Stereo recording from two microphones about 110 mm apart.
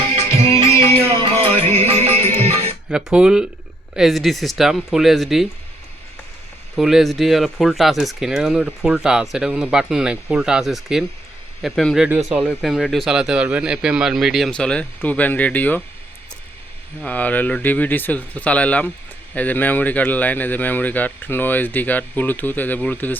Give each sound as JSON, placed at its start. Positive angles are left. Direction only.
{"t": 0.0, "sound": "music", "side_deg": -60}
{"t": 2.9, "sound": "speech", "side_deg": -10}
{"t": 6.7, "sound": "speech", "side_deg": -5}
{"t": 11.9, "sound": "speech", "side_deg": -15}
{"t": 14.5, "sound": "speech", "side_deg": 10}
{"t": 17.1, "sound": "speech", "side_deg": 15}